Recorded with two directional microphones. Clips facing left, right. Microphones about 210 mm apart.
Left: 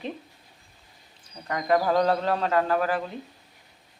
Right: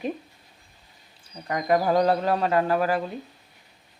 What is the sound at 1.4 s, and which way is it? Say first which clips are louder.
Speech: right 1 dB; 15° right (ahead or behind).